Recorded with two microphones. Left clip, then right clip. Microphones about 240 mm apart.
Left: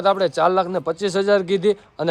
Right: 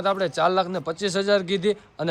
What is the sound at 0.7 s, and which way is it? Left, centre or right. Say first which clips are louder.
Speech: left 6 dB; left.